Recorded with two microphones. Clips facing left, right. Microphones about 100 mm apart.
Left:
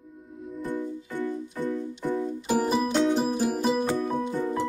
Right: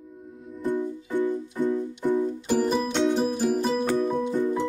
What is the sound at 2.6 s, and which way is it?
Music, 5° left (ahead or behind).